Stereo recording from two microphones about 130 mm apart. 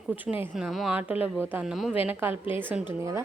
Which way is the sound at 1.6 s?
5° right (ahead or behind).